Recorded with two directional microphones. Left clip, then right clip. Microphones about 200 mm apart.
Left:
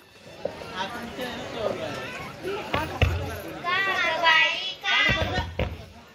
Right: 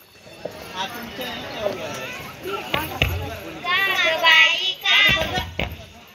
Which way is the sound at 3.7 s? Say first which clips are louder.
Right 5 dB; 55° left (ahead or behind).